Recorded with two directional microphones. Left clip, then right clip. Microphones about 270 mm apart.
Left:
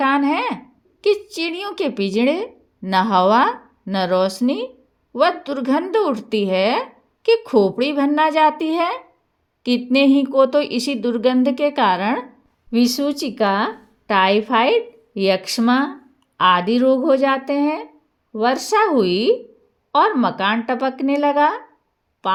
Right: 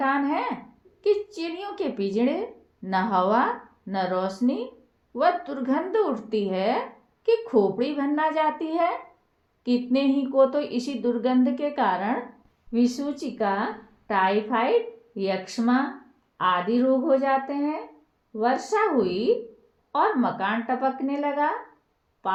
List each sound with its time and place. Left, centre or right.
0.0 s a woman's voice: left